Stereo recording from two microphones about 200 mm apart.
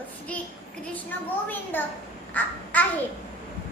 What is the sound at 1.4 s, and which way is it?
A child's voice, 10° left (ahead or behind).